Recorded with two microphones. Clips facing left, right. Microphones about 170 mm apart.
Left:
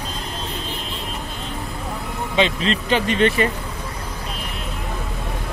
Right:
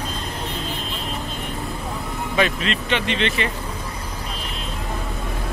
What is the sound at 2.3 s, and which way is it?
Speech, 25° left (ahead or behind).